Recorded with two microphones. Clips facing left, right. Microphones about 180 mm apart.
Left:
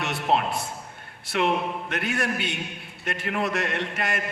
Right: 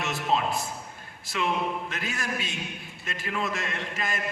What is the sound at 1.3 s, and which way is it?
A man's voice, 65° left (ahead or behind).